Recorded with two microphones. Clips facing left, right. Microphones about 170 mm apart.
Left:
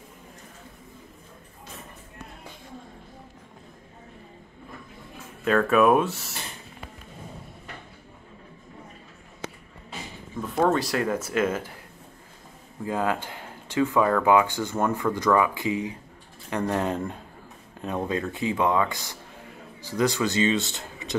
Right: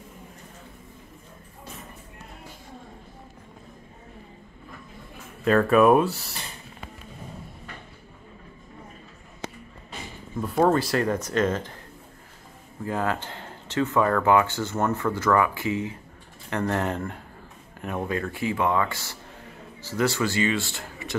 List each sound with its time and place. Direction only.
5.4 s speech: centre (ahead or behind)
10.4 s speech: centre (ahead or behind)
12.8 s speech: 15° left (ahead or behind)